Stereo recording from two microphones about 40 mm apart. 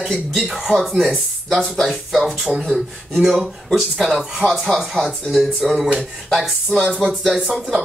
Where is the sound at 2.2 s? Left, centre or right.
Centre.